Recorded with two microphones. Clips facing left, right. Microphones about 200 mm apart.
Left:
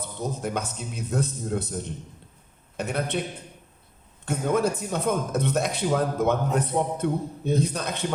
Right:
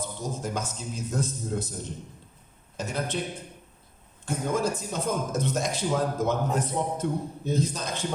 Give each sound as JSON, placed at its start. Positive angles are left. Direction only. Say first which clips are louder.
{"t": 0.0, "sound": "a man's voice", "louder": "left 2 dB", "side_deg": 60}
{"t": 2.7, "sound": "a man's voice", "louder": "left 3 dB", "side_deg": 60}
{"t": 4.3, "sound": "a man's voice", "louder": "left 3 dB", "side_deg": 60}